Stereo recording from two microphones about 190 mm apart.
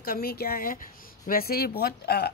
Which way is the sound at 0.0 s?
50° left (ahead or behind).